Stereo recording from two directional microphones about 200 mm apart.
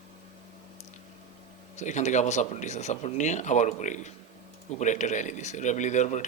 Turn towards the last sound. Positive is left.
turn(degrees=35)  # may be behind; listen again after turning